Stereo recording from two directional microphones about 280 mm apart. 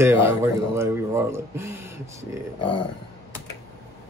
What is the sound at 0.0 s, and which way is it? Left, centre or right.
Speech, centre.